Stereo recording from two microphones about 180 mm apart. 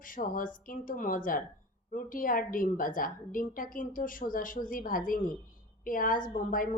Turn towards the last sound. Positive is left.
turn(degrees=50)  # may be behind; listen again after turning